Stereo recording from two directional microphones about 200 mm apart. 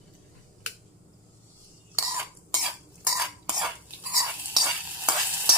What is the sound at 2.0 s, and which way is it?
Stir, 15° right (ahead or behind).